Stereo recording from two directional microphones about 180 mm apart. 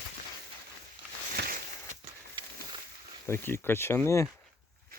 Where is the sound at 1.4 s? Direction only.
65° right (ahead or behind).